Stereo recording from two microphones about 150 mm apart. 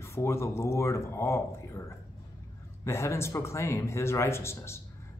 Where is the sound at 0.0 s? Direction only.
20° left (ahead or behind).